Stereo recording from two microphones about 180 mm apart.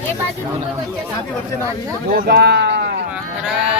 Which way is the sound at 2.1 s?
65° right (ahead or behind).